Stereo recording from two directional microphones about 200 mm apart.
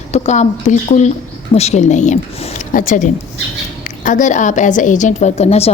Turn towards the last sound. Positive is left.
turn(degrees=30)  # may be behind; listen again after turning